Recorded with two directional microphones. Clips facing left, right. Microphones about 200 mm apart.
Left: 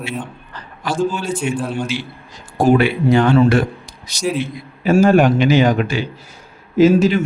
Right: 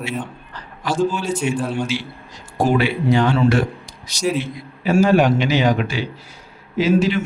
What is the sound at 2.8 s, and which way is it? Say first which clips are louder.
Speech: left 3 dB; 50° left (ahead or behind).